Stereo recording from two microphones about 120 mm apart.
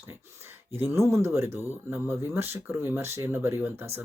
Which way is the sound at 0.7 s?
20° right (ahead or behind).